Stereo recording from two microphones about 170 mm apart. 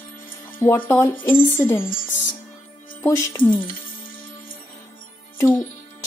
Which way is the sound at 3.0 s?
15° left (ahead or behind).